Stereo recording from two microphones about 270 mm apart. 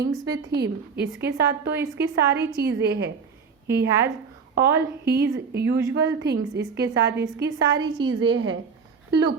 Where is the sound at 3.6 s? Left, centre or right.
Centre.